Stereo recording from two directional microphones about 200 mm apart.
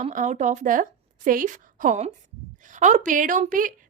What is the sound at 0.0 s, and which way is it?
A woman's voice, 35° right (ahead or behind).